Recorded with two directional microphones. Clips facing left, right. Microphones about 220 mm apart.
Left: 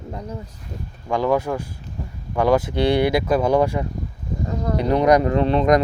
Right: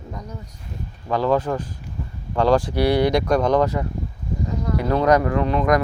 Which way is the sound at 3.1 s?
5° left (ahead or behind).